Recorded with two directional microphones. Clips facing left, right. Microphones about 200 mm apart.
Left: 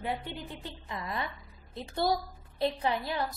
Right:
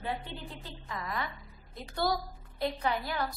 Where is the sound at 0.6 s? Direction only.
25° left (ahead or behind).